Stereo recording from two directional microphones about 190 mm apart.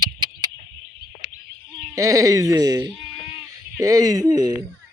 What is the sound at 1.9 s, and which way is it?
Speech, 15° right (ahead or behind).